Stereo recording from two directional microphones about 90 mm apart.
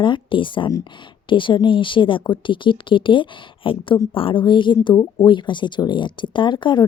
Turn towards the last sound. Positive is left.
turn(degrees=60)  # may be behind; listen again after turning